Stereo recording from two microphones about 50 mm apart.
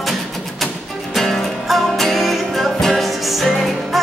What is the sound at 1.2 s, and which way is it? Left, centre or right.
Music, centre.